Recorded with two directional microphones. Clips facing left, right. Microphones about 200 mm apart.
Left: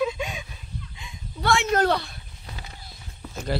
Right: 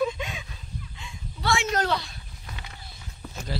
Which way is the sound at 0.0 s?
10° left (ahead or behind).